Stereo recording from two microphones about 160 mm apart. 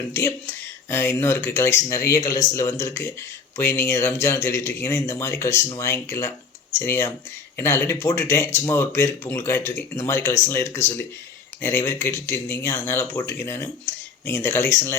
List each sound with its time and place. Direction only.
0.1 s speech: 15° left (ahead or behind)